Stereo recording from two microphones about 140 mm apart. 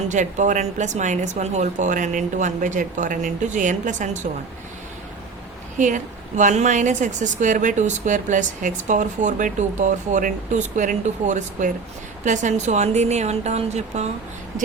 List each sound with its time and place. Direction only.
0.1 s a woman's voice: 60° right (ahead or behind)
5.7 s a woman's voice: 65° right (ahead or behind)